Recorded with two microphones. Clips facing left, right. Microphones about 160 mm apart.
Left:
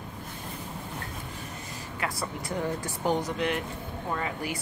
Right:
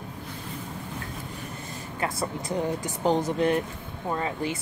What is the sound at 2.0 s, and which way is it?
Speech, 25° right (ahead or behind).